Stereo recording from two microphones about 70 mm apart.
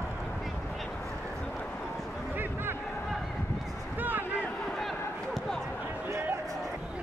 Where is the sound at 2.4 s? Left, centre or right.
Right.